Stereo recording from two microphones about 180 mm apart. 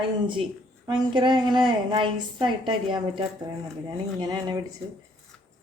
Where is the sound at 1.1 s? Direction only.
25° right (ahead or behind).